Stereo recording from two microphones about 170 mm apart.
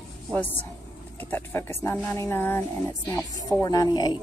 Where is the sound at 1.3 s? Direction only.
15° left (ahead or behind).